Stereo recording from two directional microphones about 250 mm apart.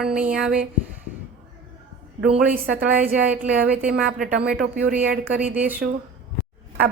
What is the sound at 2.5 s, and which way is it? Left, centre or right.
Speech, right.